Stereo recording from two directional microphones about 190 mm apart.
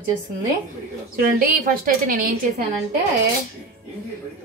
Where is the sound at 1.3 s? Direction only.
50° right (ahead or behind).